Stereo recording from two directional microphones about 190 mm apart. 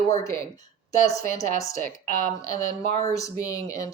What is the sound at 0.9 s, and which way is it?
Speech, 40° left (ahead or behind).